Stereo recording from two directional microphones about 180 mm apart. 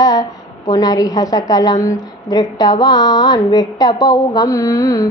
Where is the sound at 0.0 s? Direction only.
20° left (ahead or behind).